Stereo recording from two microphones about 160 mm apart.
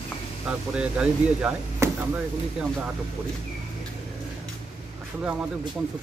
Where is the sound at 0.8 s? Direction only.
5° right (ahead or behind).